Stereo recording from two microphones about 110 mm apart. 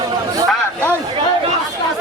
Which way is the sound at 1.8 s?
40° left (ahead or behind).